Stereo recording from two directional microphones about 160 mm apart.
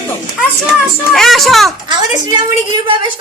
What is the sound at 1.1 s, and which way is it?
Speech, centre (ahead or behind).